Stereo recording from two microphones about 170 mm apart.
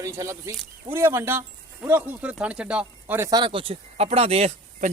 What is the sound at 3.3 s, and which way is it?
Speech, 25° right (ahead or behind).